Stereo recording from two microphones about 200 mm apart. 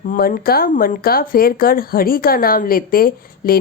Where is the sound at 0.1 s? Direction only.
45° left (ahead or behind).